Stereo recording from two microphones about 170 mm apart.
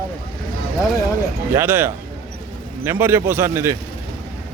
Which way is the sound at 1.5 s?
15° right (ahead or behind).